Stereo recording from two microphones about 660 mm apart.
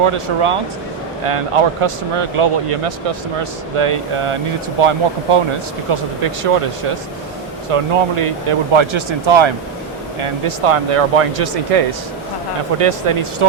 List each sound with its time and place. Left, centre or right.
0.0 s speech: right
7.7 s speech: right
12.8 s speech: right